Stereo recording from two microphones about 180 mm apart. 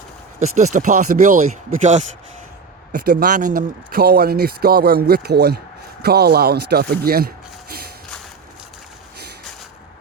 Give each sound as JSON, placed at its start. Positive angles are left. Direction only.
{"t": 0.4, "sound": "speech", "side_deg": -40}
{"t": 2.9, "sound": "speech", "side_deg": -55}